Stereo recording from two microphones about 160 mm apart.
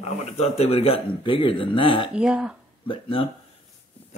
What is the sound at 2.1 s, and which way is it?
Speech, 5° right (ahead or behind).